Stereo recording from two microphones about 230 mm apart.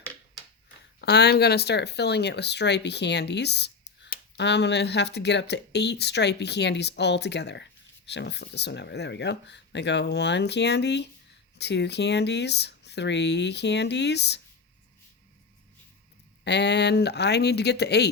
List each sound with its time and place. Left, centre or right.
1.0 s speech: left
16.4 s speech: left